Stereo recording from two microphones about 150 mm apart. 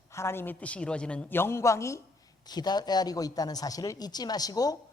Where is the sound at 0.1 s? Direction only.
15° left (ahead or behind).